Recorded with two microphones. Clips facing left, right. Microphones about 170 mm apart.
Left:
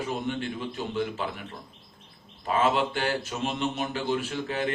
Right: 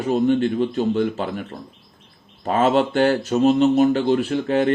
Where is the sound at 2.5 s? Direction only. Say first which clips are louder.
Right 7 dB; 45° right (ahead or behind).